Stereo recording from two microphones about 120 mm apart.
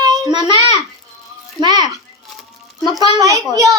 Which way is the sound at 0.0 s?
30° right (ahead or behind).